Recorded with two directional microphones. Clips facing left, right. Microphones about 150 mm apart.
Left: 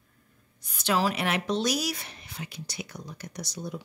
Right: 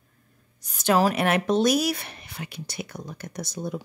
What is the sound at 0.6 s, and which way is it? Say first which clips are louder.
Speech: right 5 dB; 45° right (ahead or behind).